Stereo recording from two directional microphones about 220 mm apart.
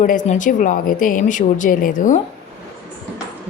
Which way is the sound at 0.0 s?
35° left (ahead or behind).